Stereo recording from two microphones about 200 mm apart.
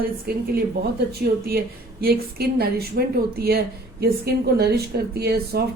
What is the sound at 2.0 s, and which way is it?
A woman's voice, 50° right (ahead or behind).